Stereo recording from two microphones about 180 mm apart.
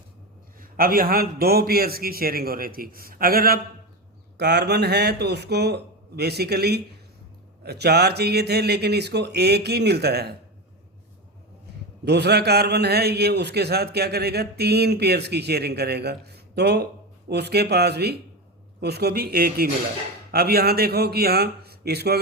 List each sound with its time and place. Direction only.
0.6 s a man's voice: 55° right (ahead or behind)
12.0 s a man's voice: 65° right (ahead or behind)